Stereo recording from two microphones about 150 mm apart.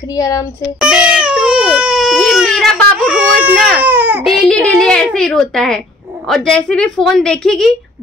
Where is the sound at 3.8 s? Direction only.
10° right (ahead or behind).